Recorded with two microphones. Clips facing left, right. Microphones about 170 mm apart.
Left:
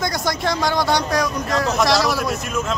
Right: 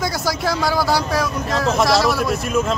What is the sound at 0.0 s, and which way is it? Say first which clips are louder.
Speech: right 1 dB; 5° right (ahead or behind).